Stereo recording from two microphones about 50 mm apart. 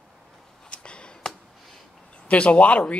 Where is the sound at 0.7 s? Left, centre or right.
Centre.